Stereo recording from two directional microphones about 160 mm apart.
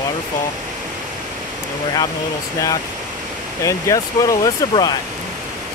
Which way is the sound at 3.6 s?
20° left (ahead or behind).